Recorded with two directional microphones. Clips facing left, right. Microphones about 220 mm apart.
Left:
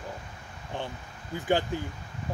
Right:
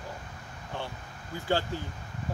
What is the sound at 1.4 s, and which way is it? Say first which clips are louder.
Speech: left 3 dB; 15° left (ahead or behind).